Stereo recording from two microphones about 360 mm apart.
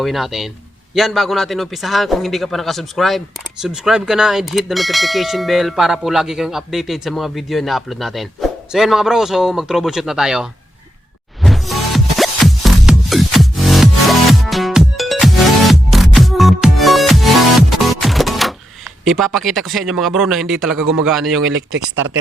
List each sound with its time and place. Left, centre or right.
0.0 s speech: centre
11.4 s music: centre
19.0 s speech: centre
21.4 s speech: right